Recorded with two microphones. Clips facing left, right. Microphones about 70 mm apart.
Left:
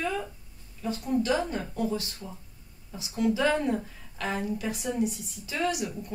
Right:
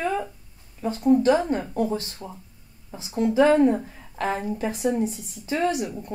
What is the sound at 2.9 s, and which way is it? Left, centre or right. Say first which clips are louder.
Speech: right 6 dB; right.